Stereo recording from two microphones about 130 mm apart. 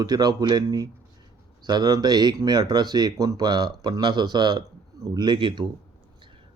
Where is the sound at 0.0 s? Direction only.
30° right (ahead or behind).